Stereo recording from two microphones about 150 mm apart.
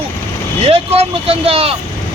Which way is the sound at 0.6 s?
40° right (ahead or behind).